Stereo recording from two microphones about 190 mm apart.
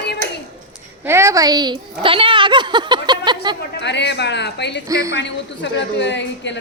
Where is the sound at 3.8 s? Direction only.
65° left (ahead or behind).